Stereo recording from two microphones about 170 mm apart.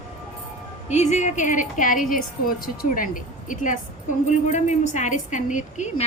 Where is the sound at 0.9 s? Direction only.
45° left (ahead or behind).